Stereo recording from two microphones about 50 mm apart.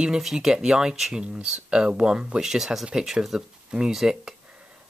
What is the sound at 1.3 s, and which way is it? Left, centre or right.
Speech, right.